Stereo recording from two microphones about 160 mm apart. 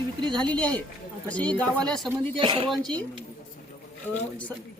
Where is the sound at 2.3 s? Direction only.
30° right (ahead or behind).